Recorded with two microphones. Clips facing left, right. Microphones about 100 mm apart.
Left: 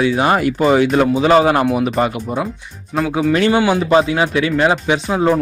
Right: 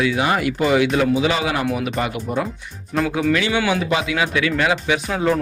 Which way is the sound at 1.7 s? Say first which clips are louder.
Left 6 dB; 30° left (ahead or behind).